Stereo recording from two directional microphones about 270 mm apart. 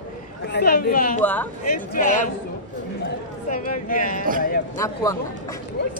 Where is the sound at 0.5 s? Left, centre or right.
Left.